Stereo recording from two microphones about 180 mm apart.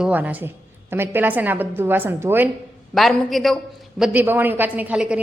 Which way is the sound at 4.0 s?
10° right (ahead or behind).